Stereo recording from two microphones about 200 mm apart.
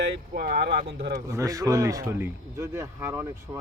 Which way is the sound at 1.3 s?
15° right (ahead or behind).